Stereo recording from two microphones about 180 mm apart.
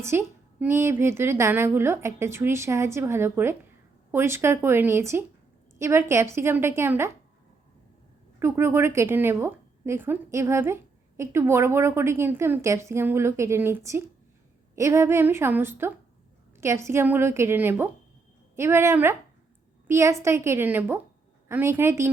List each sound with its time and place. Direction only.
0.0 s a woman's voice: 15° right (ahead or behind)
8.4 s a woman's voice: 15° right (ahead or behind)